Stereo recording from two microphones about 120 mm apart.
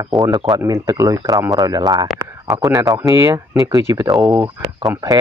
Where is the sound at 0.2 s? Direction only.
35° right (ahead or behind).